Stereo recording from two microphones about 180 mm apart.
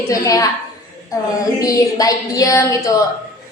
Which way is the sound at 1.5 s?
20° left (ahead or behind).